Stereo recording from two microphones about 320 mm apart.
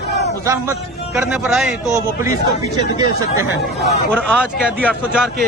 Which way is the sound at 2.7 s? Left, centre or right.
Centre.